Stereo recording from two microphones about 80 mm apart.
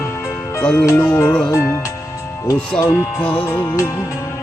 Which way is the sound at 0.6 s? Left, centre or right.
Centre.